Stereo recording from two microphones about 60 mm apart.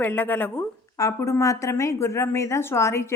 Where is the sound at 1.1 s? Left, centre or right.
Left.